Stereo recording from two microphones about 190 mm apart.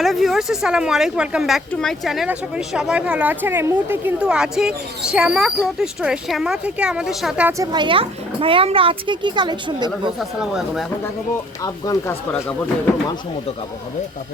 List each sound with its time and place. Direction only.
0.0 s speech: centre (ahead or behind)
7.7 s speech: 25° right (ahead or behind)
10.2 s speech: centre (ahead or behind)
11.6 s speech: 20° left (ahead or behind)